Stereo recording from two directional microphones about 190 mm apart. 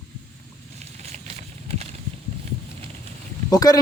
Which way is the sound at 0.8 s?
35° right (ahead or behind).